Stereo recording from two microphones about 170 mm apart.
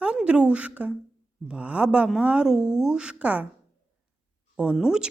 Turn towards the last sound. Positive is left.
turn(degrees=-5)  # may be behind; listen again after turning